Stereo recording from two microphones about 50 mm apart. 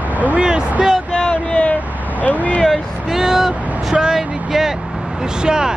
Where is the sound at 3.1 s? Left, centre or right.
Centre.